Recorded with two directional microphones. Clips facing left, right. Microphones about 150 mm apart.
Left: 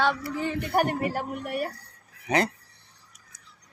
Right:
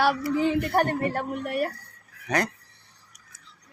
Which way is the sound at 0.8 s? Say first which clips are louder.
Right 1 dB; 10° left (ahead or behind).